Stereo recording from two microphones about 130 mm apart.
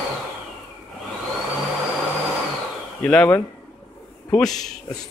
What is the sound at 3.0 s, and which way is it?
Speech, 10° left (ahead or behind).